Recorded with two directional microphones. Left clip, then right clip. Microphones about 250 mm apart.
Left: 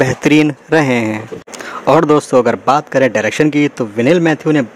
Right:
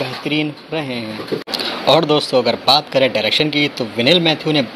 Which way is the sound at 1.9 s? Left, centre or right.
Left.